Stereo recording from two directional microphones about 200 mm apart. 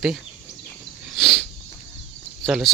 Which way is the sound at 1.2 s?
Centre (ahead or behind).